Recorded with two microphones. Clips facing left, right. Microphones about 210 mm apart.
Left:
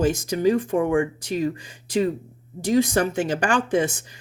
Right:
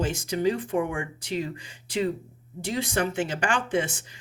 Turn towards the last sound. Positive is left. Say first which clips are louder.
# left 5 dB
turn(degrees=40)  # may be behind; listen again after turning